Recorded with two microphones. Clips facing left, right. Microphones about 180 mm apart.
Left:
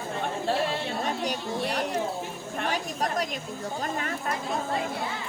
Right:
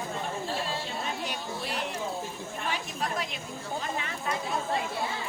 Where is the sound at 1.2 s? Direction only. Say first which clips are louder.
Left 6 dB; 45° left (ahead or behind).